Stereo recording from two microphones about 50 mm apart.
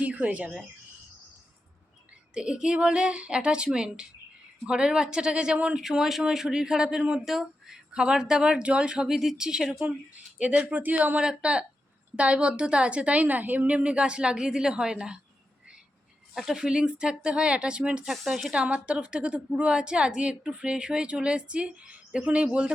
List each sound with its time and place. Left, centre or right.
0.0 s speech: right
2.3 s a woman's voice: centre
7.3 s speech: centre
9.0 s speech: centre
10.6 s speech: right
11.2 s a woman's voice: centre
16.3 s a woman's voice: centre
18.0 s speech: centre
18.5 s a woman's voice: right